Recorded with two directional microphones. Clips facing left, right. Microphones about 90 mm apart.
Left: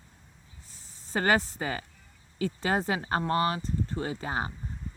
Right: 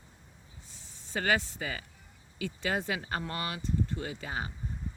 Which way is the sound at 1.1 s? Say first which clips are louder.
Left 4 dB; 40° left (ahead or behind).